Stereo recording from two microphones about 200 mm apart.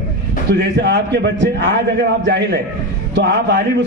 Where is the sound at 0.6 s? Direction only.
55° right (ahead or behind).